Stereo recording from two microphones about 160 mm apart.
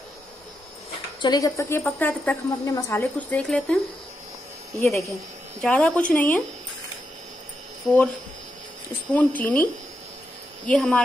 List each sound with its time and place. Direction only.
1.2 s a woman's voice: 25° left (ahead or behind); by 3.8 s 5° left (ahead or behind)
4.7 s a woman's voice: 15° left (ahead or behind)
7.8 s speech: centre (ahead or behind)
9.1 s a woman's voice: 10° left (ahead or behind)
10.7 s speech: 5° left (ahead or behind)